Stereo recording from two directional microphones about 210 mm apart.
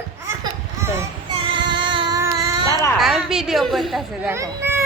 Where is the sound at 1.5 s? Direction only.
20° right (ahead or behind).